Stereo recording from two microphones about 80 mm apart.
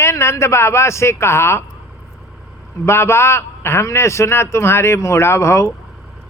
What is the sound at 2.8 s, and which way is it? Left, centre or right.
A man's voice, left.